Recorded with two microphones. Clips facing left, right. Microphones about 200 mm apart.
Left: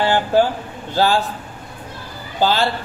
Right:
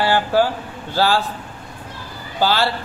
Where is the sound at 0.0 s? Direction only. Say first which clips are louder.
Left 1 dB; 20° left (ahead or behind).